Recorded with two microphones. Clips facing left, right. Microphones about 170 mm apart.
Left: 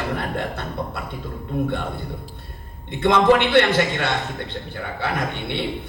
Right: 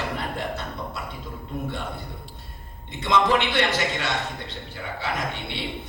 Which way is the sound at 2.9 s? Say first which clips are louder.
Left 6 dB; 55° left (ahead or behind).